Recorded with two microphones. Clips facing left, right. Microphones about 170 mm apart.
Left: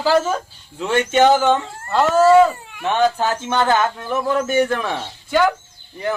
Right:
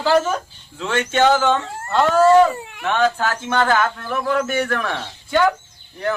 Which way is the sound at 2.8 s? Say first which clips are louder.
Left 1 dB; 20° left (ahead or behind).